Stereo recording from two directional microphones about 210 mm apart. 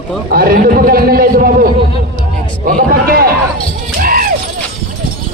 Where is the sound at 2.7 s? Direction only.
40° right (ahead or behind).